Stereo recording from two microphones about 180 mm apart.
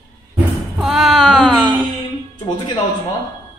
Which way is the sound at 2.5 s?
20° left (ahead or behind).